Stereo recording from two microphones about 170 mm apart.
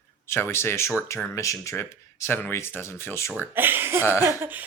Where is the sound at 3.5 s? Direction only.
10° right (ahead or behind).